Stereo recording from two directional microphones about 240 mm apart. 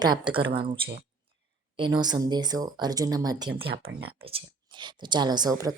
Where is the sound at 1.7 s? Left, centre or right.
Centre.